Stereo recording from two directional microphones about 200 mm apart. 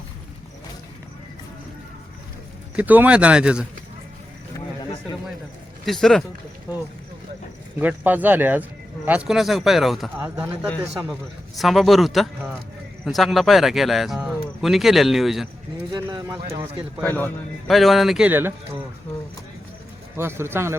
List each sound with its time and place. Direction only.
2.7 s speech: 10° right (ahead or behind)
5.8 s speech: centre (ahead or behind)
7.8 s speech: 10° right (ahead or behind)
15.9 s speech: 20° right (ahead or behind)
17.0 s speech: 10° left (ahead or behind); by 18.8 s 10° right (ahead or behind)
20.1 s speech: 10° right (ahead or behind)